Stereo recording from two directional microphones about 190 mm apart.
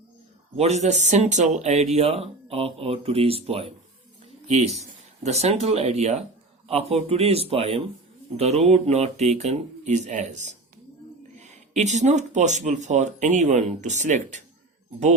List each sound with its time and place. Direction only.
0.5 s speech: 35° right (ahead or behind)